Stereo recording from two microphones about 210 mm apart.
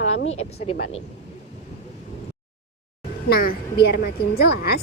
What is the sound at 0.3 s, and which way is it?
Speech, 30° left (ahead or behind).